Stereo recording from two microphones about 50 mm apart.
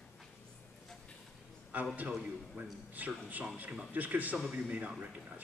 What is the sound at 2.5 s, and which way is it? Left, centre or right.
A man's voice, right.